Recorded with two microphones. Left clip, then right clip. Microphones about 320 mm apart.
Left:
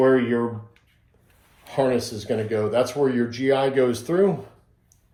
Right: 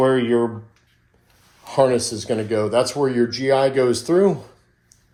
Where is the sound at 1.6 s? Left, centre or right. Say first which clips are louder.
Right 5 dB; centre.